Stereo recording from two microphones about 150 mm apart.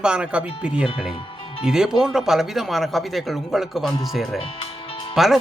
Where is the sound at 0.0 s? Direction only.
5° right (ahead or behind).